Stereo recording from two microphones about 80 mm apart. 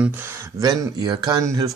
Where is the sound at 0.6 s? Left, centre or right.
Right.